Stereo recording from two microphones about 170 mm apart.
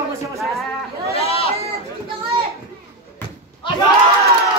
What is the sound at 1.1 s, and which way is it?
Chatter, 35° left (ahead or behind).